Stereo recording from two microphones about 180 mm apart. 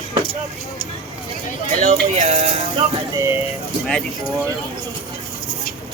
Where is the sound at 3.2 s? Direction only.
15° right (ahead or behind).